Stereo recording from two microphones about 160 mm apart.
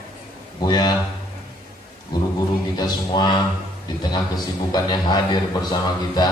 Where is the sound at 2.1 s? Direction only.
25° left (ahead or behind).